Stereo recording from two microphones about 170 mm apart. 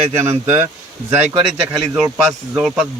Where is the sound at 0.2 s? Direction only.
15° right (ahead or behind).